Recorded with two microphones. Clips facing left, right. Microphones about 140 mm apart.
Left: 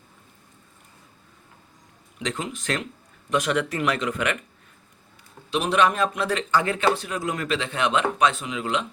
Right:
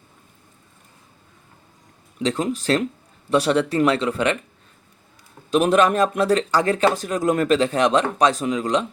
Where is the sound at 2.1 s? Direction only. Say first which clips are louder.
Right 8 dB; 40° right (ahead or behind).